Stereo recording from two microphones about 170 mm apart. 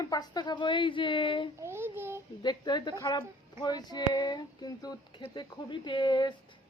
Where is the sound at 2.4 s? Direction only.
25° left (ahead or behind).